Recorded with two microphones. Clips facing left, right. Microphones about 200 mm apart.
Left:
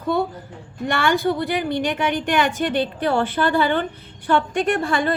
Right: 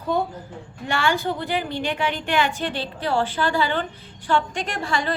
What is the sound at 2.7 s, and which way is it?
A woman's voice, 60° left (ahead or behind).